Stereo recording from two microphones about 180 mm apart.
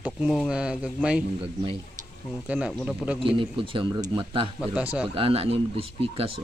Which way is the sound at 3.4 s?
30° right (ahead or behind).